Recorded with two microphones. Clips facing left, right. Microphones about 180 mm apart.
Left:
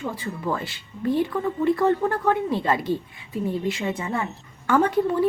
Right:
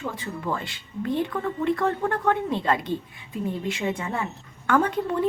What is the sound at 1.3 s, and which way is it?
Speech, 5° left (ahead or behind).